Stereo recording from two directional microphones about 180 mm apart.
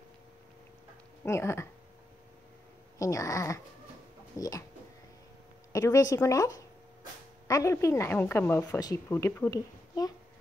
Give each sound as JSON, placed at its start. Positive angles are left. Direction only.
{"t": 1.2, "sound": "a woman's voice", "side_deg": 15}
{"t": 3.0, "sound": "a woman's voice", "side_deg": 15}
{"t": 5.7, "sound": "a woman's voice", "side_deg": 15}